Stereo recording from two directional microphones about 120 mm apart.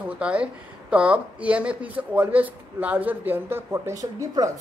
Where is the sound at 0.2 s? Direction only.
10° right (ahead or behind).